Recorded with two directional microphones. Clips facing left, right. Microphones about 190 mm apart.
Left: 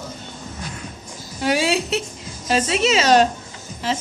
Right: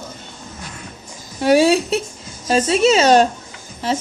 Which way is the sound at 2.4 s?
40° right (ahead or behind).